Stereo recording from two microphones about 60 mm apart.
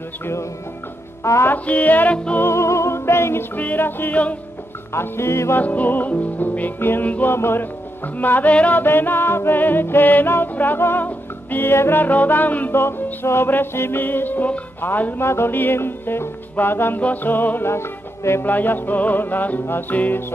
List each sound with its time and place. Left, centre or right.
0.2 s music: left
1.2 s speech: left
1.5 s music: left
2.4 s music: left
3.5 s music: left
5.6 s music: left
7.3 s music: left
12.0 s music: left
12.7 s music: left
15.1 s music: left
18.4 s music: left